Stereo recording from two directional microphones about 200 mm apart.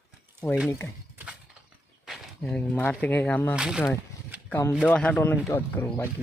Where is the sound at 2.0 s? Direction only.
5° left (ahead or behind).